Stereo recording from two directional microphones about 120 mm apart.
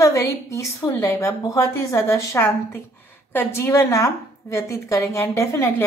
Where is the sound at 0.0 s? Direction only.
25° left (ahead or behind).